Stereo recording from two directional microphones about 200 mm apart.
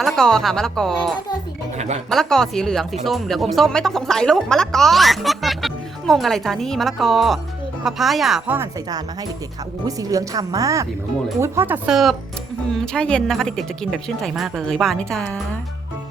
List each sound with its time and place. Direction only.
0.0 s speech: 5° left (ahead or behind)
9.8 s a woman's voice: 15° right (ahead or behind); by 15.4 s 5° left (ahead or behind)